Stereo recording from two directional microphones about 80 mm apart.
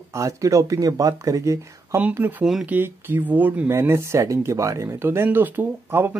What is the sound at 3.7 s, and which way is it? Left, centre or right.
A man's voice, right.